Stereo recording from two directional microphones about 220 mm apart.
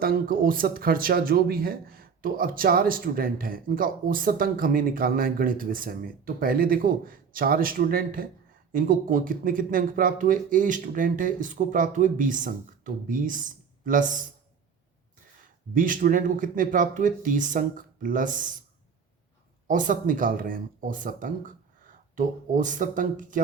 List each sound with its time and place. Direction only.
0.0 s speech: 40° right (ahead or behind)
15.7 s speech: 40° right (ahead or behind)
19.6 s speech: 35° right (ahead or behind)